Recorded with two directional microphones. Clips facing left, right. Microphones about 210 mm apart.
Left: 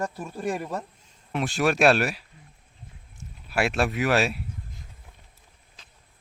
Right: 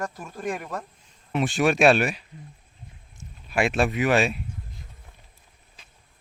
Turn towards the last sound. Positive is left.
turn(degrees=0)  # may be behind; listen again after turning